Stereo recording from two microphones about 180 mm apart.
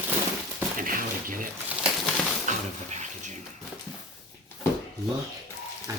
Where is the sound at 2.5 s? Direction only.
40° right (ahead or behind).